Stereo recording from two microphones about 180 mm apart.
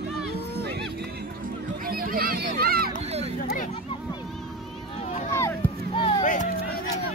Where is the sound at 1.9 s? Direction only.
55° right (ahead or behind).